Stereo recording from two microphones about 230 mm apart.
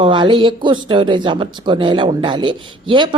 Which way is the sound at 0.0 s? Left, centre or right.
Right.